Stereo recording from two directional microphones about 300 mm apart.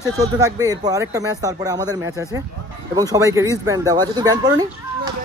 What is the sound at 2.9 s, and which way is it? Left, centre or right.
Speech, centre.